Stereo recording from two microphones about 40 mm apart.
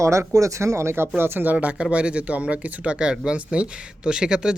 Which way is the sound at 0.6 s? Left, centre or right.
Right.